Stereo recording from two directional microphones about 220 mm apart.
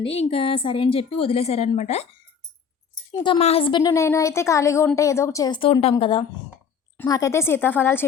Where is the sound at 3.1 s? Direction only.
20° left (ahead or behind).